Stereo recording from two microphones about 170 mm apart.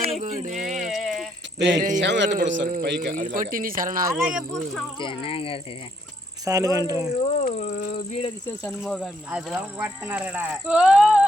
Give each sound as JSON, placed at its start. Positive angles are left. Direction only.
{"t": 0.0, "sound": "a sound", "side_deg": -50}
{"t": 0.5, "sound": "music", "side_deg": 0}
{"t": 1.5, "sound": "a man's voice", "side_deg": -90}
{"t": 3.2, "sound": "speech", "side_deg": -50}
{"t": 4.2, "sound": "speech", "side_deg": -5}
{"t": 4.9, "sound": "speech", "side_deg": 30}
{"t": 6.4, "sound": "speech", "side_deg": -20}
{"t": 7.5, "sound": "speech", "side_deg": 45}
{"t": 8.8, "sound": "speech", "side_deg": 5}
{"t": 9.3, "sound": "speech", "side_deg": -5}